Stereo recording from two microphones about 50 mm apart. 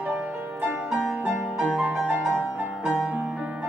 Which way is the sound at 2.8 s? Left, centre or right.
Centre.